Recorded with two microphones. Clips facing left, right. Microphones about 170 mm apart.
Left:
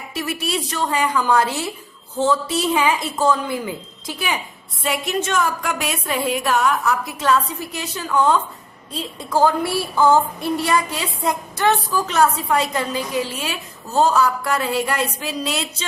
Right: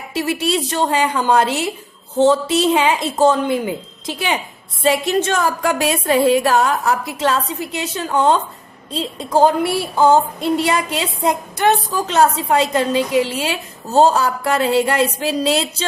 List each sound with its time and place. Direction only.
0.1 s a woman's voice: 30° right (ahead or behind)